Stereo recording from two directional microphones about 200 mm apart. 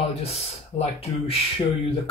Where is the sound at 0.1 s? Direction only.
30° left (ahead or behind).